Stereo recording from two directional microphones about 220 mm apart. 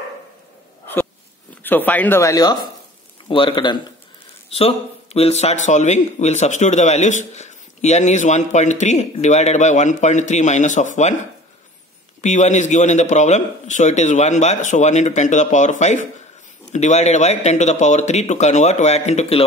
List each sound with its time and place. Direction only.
1.6 s a man's voice: 10° left (ahead or behind); by 11.1 s 35° left (ahead or behind)
12.2 s speech: 35° left (ahead or behind)